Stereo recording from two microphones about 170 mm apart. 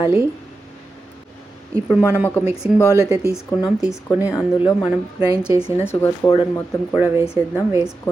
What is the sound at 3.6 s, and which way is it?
Speech, 5° right (ahead or behind).